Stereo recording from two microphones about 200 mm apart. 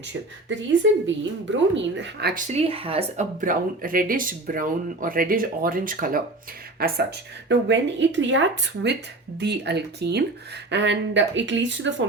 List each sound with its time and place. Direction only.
0.4 s a woman's voice: 65° right (ahead or behind)
2.3 s speech: 35° right (ahead or behind)
3.4 s speech: 45° right (ahead or behind)
7.4 s a woman's voice: 65° right (ahead or behind)